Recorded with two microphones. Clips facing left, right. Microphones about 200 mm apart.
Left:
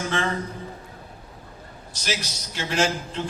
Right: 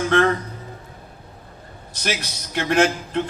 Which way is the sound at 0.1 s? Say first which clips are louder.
Right 10 dB; 60° right (ahead or behind).